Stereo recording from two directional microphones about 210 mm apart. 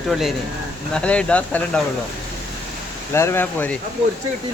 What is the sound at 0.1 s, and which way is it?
Speech, centre (ahead or behind).